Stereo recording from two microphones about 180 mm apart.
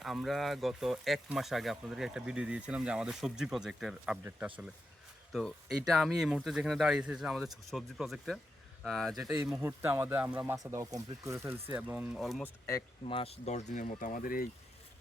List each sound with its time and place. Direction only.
0.0 s speech: centre (ahead or behind)
9.6 s speech: 15° right (ahead or behind)
13.1 s speech: 30° left (ahead or behind); by 14.4 s 50° left (ahead or behind)